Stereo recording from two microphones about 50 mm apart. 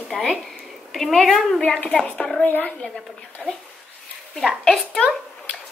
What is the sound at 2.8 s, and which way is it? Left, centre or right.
Speech, centre.